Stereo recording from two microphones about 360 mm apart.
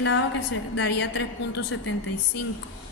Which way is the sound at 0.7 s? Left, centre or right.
Left.